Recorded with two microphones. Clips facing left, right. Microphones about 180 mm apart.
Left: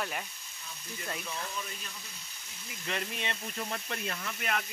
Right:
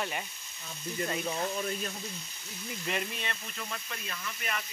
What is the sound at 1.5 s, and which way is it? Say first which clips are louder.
Speech: right 8 dB; 50° right (ahead or behind).